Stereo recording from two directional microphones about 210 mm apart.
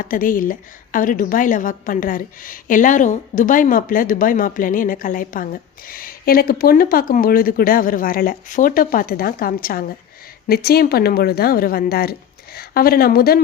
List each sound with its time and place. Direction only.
0.0 s a woman's voice: 40° left (ahead or behind)